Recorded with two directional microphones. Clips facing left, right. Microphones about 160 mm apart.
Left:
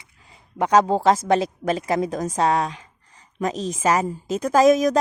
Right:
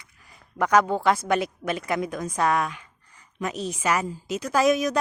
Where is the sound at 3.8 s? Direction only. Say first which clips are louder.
Left 5 dB; 40° left (ahead or behind).